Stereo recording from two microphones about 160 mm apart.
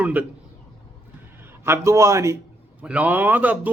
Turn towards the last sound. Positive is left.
turn(degrees=-10)  # may be behind; listen again after turning